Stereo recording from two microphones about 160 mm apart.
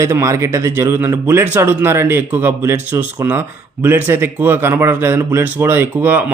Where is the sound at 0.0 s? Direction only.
20° right (ahead or behind).